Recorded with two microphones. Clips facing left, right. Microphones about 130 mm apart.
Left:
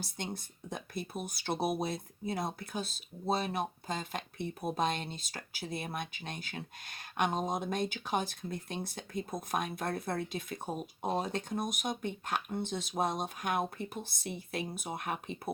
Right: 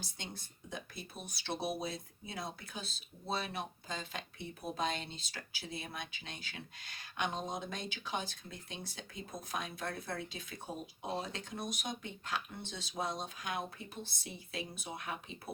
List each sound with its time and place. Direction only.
0.2 s speech: 50° left (ahead or behind)